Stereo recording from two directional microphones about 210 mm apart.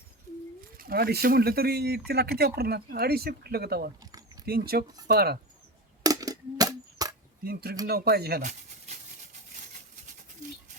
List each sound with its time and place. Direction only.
0.8 s speech: 45° right (ahead or behind)
6.0 s a sound: 15° right (ahead or behind)
7.4 s speech: 45° right (ahead or behind)